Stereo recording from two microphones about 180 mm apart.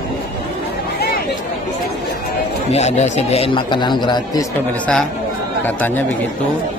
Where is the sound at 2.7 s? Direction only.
40° left (ahead or behind); by 4.5 s 20° left (ahead or behind).